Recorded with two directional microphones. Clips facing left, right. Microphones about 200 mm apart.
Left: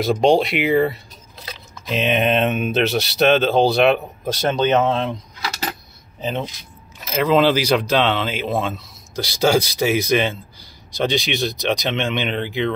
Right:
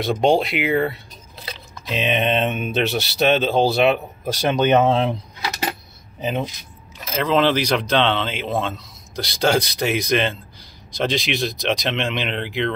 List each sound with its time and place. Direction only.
0.0 s speech: centre (ahead or behind); by 5.1 s 15° right (ahead or behind)
5.4 s coin: 15° right (ahead or behind)
7.2 s speech: 10° left (ahead or behind)